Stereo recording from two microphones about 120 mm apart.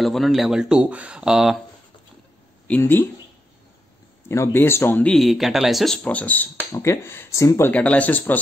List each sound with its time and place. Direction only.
0.0 s speech: centre (ahead or behind)
2.7 s speech: 20° left (ahead or behind)
4.3 s speech: 20° left (ahead or behind)
5.1 s speech: centre (ahead or behind)
6.0 s speech: 15° left (ahead or behind)
6.7 s speech: 25° left (ahead or behind)
7.7 s speech: 10° left (ahead or behind)